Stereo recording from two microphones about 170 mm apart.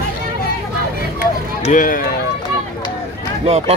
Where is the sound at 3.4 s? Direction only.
35° right (ahead or behind).